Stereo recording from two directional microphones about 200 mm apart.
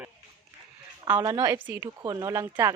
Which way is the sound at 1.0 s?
20° right (ahead or behind).